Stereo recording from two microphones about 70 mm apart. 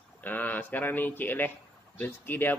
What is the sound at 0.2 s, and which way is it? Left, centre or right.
Speech, left.